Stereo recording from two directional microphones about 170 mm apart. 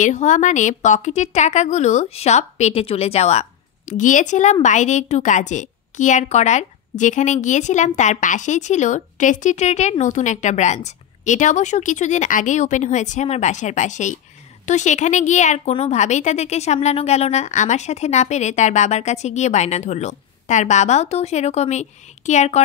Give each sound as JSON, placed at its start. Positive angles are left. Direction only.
{"t": 0.0, "sound": "a woman's voice", "side_deg": 45}